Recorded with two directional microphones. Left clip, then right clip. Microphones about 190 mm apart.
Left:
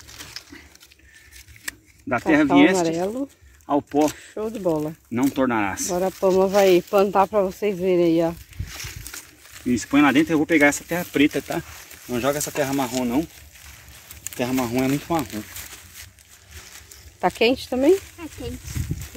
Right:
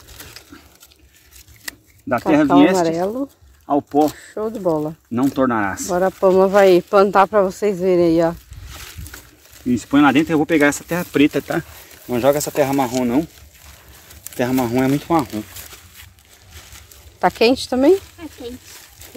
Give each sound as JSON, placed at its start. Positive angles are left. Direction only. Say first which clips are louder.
{"t": 2.0, "sound": "speech", "louder": "right 3 dB", "side_deg": -35}
{"t": 3.0, "sound": "speech", "louder": "right 4 dB", "side_deg": -5}
{"t": 3.6, "sound": "speech", "louder": "right 4 dB", "side_deg": -25}
{"t": 4.0, "sound": "speech", "louder": "right 4 dB", "side_deg": 0}
{"t": 5.1, "sound": "speech", "louder": "right 4 dB", "side_deg": -40}
{"t": 5.9, "sound": "speech", "louder": "right 7 dB", "side_deg": -10}
{"t": 9.1, "sound": "a sound", "louder": "left 1 dB", "side_deg": -25}
{"t": 9.7, "sound": "speech", "louder": "right 4 dB", "side_deg": -30}
{"t": 12.8, "sound": "speech", "louder": "right 5 dB", "side_deg": -25}
{"t": 14.3, "sound": "speech", "louder": "right 5 dB", "side_deg": -40}
{"t": 15.1, "sound": "speech", "louder": "right 7 dB", "side_deg": -20}
{"t": 17.2, "sound": "speech", "louder": "right 5 dB", "side_deg": -10}